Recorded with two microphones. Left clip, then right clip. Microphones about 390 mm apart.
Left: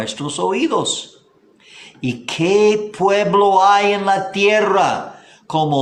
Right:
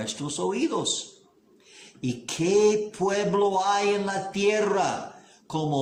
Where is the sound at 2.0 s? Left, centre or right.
Left.